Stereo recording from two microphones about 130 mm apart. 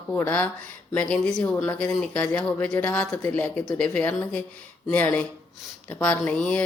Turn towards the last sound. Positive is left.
turn(degrees=10)  # may be behind; listen again after turning